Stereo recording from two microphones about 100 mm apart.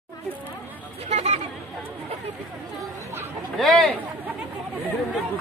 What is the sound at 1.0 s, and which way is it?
Speech, 90° right.